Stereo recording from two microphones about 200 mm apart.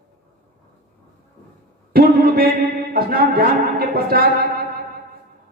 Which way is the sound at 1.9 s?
50° right (ahead or behind).